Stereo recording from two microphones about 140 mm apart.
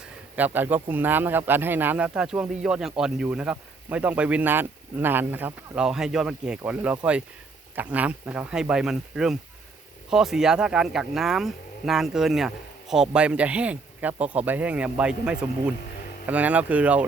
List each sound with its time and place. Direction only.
0.0 s speech: 10° right (ahead or behind)